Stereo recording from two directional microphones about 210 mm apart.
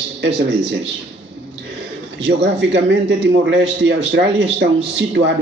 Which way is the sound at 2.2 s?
55° right (ahead or behind).